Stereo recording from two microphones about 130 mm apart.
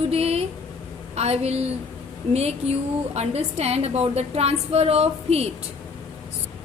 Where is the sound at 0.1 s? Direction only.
50° right (ahead or behind).